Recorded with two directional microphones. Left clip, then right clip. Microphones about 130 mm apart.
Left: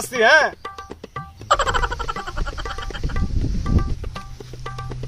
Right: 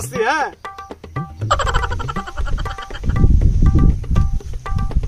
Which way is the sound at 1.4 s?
Centre (ahead or behind).